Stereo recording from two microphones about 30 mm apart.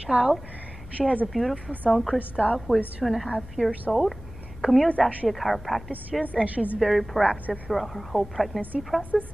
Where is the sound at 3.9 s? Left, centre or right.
Centre.